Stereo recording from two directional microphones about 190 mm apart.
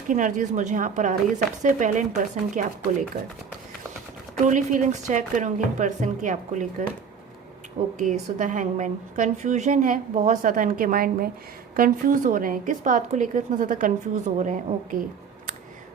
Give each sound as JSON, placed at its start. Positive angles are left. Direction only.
{"t": 0.1, "sound": "speech", "side_deg": -45}
{"t": 4.4, "sound": "speech", "side_deg": -40}
{"t": 7.9, "sound": "a woman's voice", "side_deg": -40}